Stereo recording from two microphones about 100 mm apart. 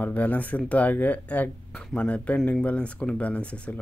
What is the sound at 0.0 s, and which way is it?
Speech, 15° left (ahead or behind).